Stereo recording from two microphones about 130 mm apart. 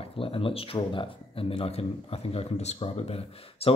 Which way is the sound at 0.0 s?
45° left (ahead or behind).